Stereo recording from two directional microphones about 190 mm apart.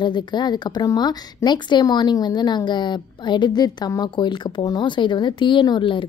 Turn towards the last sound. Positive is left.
turn(degrees=25)  # may be behind; listen again after turning